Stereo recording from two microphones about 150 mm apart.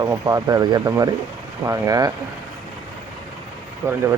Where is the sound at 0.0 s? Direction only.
20° right (ahead or behind).